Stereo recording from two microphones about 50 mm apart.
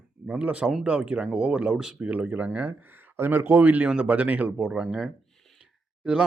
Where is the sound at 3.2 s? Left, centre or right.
Right.